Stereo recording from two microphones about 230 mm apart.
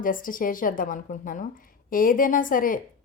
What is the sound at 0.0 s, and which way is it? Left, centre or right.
A woman's voice, left.